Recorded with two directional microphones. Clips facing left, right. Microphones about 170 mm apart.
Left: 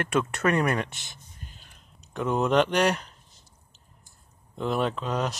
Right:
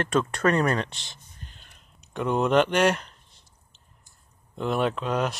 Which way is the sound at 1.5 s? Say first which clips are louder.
Left 1 dB; centre (ahead or behind).